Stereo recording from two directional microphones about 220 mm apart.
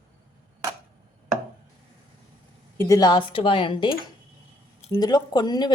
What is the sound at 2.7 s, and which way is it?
A woman's voice, 15° left (ahead or behind).